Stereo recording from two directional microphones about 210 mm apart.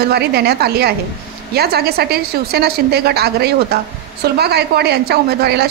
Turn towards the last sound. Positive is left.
turn(degrees=-50)  # may be behind; listen again after turning